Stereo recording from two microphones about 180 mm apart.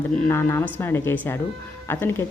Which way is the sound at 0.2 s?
15° left (ahead or behind).